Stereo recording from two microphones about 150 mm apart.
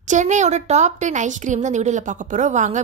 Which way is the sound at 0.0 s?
55° right (ahead or behind).